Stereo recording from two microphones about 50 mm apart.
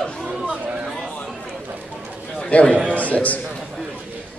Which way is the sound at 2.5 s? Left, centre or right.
Left.